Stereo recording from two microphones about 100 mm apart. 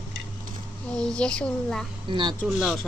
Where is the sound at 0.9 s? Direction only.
10° left (ahead or behind).